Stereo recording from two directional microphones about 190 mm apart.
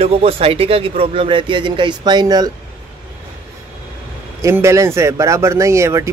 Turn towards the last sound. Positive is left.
turn(degrees=-15)  # may be behind; listen again after turning